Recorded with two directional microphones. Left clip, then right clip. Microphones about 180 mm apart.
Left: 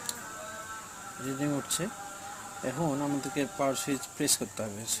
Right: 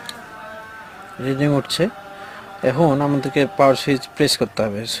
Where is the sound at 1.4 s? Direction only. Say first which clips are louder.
Right 14 dB; 45° right (ahead or behind).